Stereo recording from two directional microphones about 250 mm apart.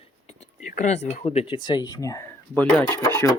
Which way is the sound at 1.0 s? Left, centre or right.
Left.